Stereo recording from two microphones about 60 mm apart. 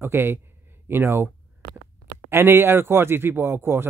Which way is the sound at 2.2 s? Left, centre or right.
Right.